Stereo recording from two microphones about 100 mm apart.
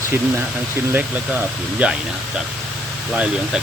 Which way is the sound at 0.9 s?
15° right (ahead or behind).